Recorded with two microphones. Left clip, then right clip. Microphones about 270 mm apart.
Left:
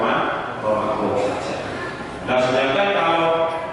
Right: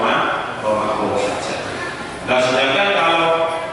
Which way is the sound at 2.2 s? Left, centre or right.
Centre.